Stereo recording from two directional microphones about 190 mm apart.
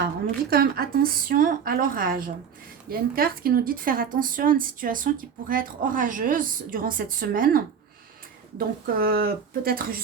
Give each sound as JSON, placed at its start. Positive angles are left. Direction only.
{"t": 0.5, "sound": "a woman's voice", "side_deg": -55}